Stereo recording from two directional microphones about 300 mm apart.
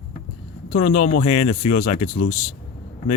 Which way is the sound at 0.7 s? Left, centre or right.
Left.